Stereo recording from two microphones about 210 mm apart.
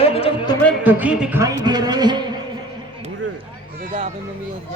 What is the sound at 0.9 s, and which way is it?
Speech, 5° right (ahead or behind).